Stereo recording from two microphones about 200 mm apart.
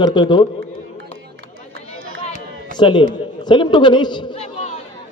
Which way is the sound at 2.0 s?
85° right.